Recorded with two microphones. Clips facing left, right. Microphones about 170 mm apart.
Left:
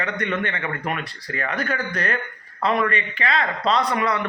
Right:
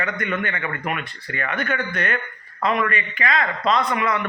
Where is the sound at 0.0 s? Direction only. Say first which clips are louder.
Even; 30° left (ahead or behind).